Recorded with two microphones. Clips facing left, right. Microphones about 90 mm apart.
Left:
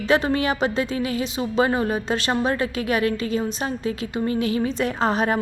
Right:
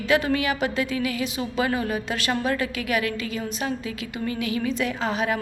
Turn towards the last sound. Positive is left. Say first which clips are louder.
# left 4 dB
turn(degrees=40)  # may be behind; listen again after turning